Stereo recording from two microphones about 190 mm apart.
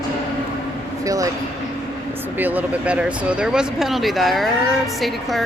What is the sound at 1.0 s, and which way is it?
Speech, 20° right (ahead or behind).